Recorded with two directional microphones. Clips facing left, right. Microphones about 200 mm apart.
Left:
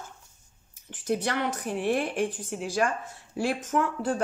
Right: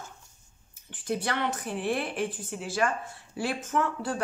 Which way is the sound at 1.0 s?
45° left (ahead or behind).